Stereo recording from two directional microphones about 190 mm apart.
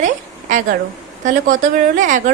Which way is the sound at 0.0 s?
40° right (ahead or behind).